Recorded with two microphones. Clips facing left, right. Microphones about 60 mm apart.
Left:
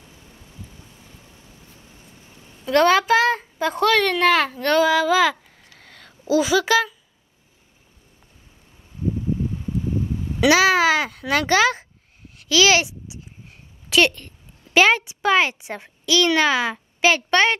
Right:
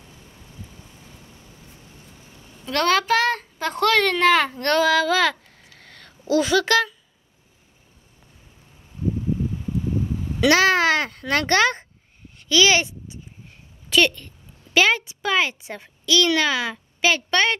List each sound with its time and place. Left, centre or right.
2.6 s a child's voice: centre
10.4 s a child's voice: centre
12.4 s a sound: centre
14.7 s a child's voice: centre